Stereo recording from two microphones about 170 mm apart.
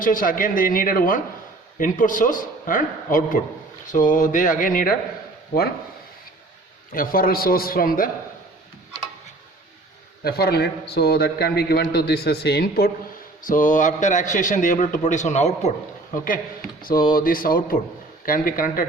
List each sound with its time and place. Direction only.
0.0 s a man's voice: 55° left (ahead or behind)
6.9 s speech: 55° left (ahead or behind)
10.2 s a man's voice: 65° left (ahead or behind)
13.4 s a man's voice: 50° left (ahead or behind)
17.2 s speech: 55° left (ahead or behind)